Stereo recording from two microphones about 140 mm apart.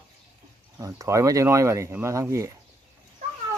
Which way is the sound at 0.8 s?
25° right (ahead or behind).